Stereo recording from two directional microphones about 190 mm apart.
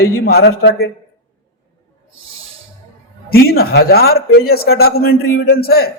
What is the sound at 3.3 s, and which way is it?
A man's voice, 55° left (ahead or behind).